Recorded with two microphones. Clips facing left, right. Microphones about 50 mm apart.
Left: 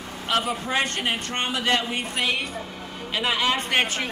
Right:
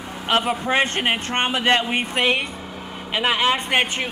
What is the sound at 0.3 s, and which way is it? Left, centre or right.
Speech, right.